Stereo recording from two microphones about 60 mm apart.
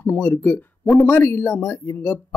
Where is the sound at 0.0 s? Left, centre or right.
Left.